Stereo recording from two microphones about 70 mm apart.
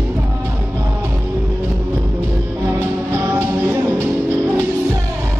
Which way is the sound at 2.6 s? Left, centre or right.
Right.